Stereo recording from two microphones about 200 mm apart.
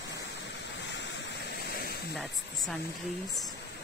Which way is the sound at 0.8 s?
60° left (ahead or behind).